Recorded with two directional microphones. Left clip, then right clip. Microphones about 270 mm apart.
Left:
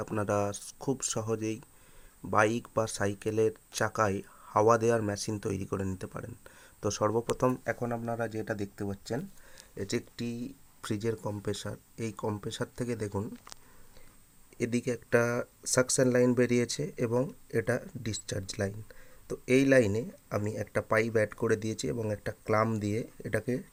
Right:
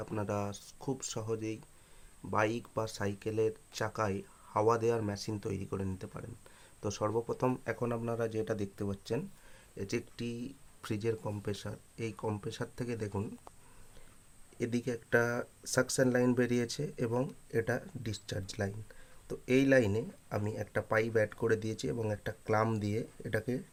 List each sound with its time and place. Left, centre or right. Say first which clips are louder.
0.0 s speech: left 6 dB; centre
7.4 s speech: left 4 dB; centre
14.6 s speech: left 4 dB; centre